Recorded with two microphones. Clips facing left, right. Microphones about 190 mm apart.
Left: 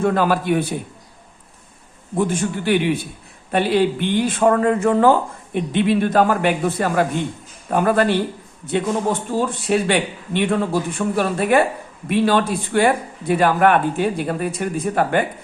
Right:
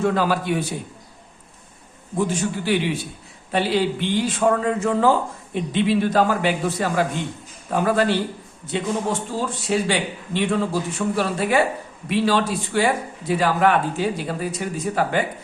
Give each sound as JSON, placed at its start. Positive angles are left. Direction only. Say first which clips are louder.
{"t": 0.0, "sound": "speech", "louder": "left 3 dB", "side_deg": 55}
{"t": 2.1, "sound": "speech", "louder": "left 2 dB", "side_deg": 55}